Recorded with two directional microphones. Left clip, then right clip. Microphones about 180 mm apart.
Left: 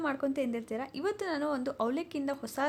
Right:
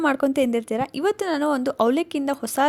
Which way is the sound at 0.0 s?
50° right (ahead or behind).